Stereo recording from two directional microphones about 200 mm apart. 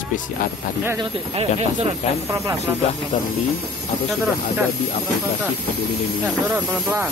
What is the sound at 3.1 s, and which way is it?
Speech, 40° left (ahead or behind).